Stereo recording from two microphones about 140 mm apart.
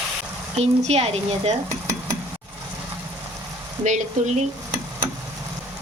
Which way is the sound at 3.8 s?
60° right (ahead or behind).